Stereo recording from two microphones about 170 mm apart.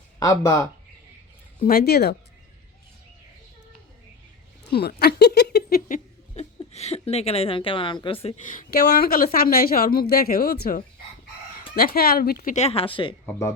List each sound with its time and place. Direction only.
0.2 s speech: 20° left (ahead or behind)
1.6 s speech: 65° left (ahead or behind)
4.7 s speech: 65° left (ahead or behind)
6.3 s speech: 40° left (ahead or behind)
8.4 s a woman's voice: 55° left (ahead or behind)
12.5 s speech: 35° left (ahead or behind)